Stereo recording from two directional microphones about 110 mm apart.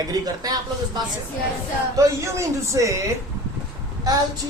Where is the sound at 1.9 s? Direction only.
30° right (ahead or behind).